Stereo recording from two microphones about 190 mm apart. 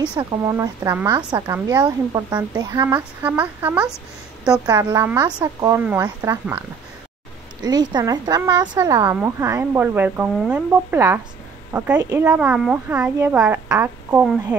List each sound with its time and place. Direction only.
0.1 s a woman's voice: 25° right (ahead or behind); by 3.9 s 10° right (ahead or behind)
4.5 s a woman's voice: 20° right (ahead or behind)
7.6 s a woman's voice: 20° right (ahead or behind)